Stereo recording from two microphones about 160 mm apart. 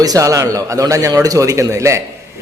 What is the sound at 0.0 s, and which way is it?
A man's voice, 20° right (ahead or behind).